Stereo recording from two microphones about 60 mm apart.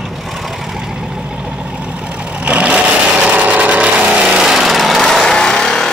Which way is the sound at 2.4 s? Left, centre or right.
Right.